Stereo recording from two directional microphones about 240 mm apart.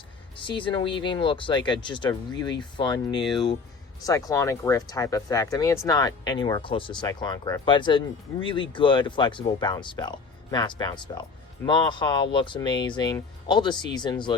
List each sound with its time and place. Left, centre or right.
0.3 s speech: centre